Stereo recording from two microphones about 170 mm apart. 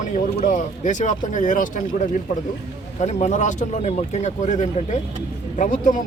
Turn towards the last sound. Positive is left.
turn(degrees=50)  # may be behind; listen again after turning